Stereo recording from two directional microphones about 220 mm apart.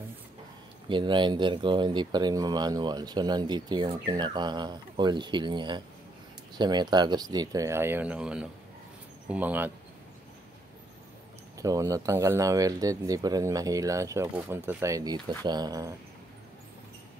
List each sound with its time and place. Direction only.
0.8 s speech: 20° right (ahead or behind)
11.5 s speech: 15° right (ahead or behind)